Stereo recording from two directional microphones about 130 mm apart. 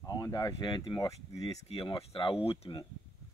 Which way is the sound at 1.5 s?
50° left (ahead or behind).